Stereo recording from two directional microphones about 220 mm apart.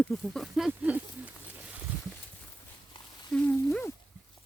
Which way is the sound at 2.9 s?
20° left (ahead or behind).